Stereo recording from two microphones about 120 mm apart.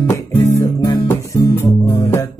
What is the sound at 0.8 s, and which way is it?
Music, 20° left (ahead or behind).